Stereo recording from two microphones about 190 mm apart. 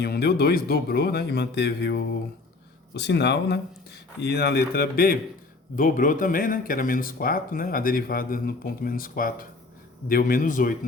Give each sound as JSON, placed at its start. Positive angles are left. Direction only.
{"t": 0.0, "sound": "a man's voice", "side_deg": 55}